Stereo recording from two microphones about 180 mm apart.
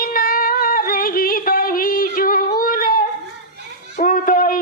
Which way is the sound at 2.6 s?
50° left (ahead or behind).